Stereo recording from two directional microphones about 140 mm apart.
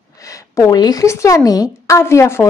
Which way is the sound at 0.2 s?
20° left (ahead or behind).